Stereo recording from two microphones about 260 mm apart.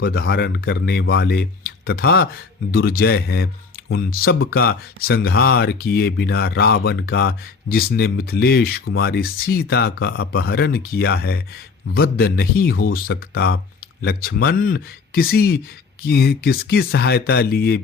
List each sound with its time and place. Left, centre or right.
0.0 s speech: left